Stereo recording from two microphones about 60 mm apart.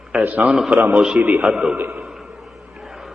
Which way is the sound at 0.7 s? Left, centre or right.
Right.